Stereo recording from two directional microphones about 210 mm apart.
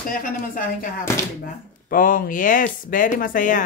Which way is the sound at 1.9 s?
40° left (ahead or behind).